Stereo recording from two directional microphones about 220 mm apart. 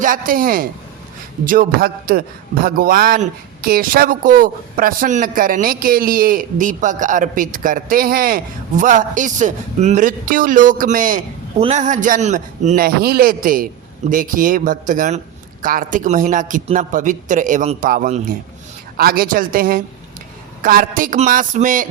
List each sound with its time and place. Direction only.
0.0 s a man's voice: 40° right (ahead or behind)